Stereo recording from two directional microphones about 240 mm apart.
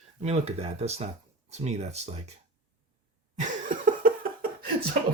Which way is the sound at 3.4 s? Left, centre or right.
Right.